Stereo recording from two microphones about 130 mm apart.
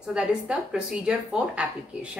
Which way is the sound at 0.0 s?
5° right (ahead or behind).